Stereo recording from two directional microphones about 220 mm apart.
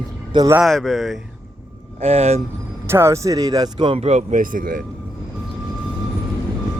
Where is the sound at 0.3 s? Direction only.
15° right (ahead or behind).